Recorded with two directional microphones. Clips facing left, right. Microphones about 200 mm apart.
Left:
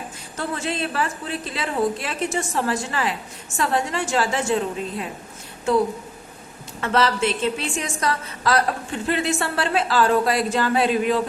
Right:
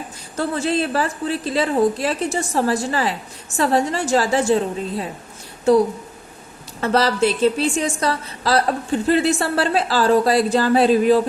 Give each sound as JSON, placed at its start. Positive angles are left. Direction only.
{"t": 0.3, "sound": "a woman's voice", "side_deg": -35}
{"t": 6.8, "sound": "a woman's voice", "side_deg": -35}